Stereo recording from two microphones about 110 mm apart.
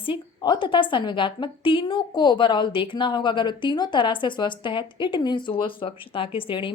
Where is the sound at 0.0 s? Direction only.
45° left (ahead or behind).